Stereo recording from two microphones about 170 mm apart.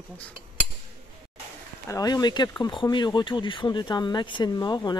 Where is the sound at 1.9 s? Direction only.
20° left (ahead or behind).